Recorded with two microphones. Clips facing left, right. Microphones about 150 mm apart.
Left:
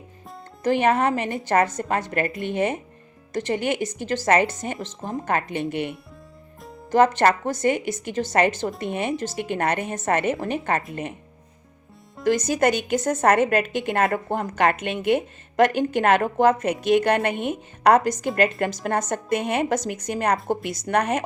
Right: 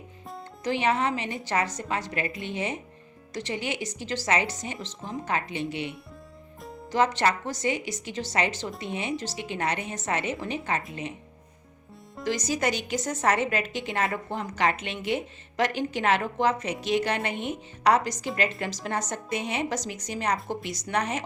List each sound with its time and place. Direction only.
0.6 s a woman's voice: 50° left (ahead or behind)
12.2 s a woman's voice: 55° left (ahead or behind)